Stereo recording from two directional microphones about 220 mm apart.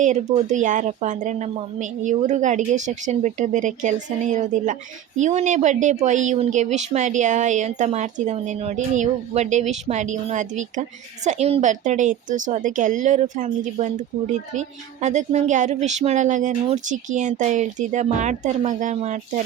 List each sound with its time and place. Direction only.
0.4 s speech: 35° right (ahead or behind)
15.0 s speech: 30° right (ahead or behind)